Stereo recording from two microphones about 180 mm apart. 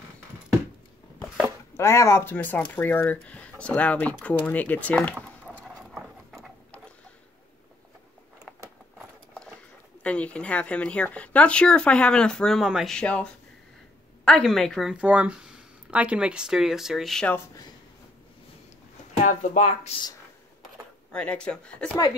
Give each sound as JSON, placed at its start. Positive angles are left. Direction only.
{"t": 1.8, "sound": "speech", "side_deg": 15}
{"t": 5.6, "sound": "a sound", "side_deg": 0}
{"t": 8.5, "sound": "a sound", "side_deg": 0}
{"t": 10.0, "sound": "speech", "side_deg": 5}
{"t": 19.2, "sound": "speech", "side_deg": 40}
{"t": 21.1, "sound": "speech", "side_deg": 5}